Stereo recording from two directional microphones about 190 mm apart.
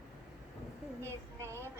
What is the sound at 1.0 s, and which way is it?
Speech, 15° right (ahead or behind).